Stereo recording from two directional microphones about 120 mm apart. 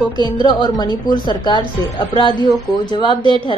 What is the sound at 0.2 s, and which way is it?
A woman's voice, 40° left (ahead or behind).